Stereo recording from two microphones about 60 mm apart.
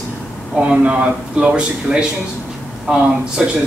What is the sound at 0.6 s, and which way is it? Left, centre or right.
Speech, centre.